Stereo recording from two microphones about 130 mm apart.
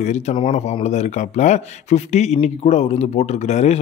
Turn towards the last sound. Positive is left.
turn(degrees=55)  # may be behind; listen again after turning